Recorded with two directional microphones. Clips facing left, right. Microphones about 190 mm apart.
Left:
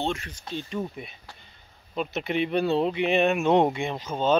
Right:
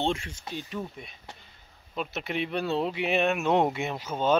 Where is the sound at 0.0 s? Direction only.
25° right (ahead or behind).